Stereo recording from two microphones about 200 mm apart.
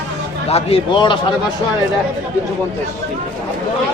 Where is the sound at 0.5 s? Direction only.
25° left (ahead or behind).